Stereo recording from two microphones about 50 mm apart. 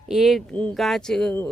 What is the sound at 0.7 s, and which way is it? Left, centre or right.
Speech, centre.